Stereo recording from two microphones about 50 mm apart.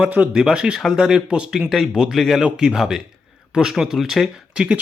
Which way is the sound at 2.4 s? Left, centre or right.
Centre.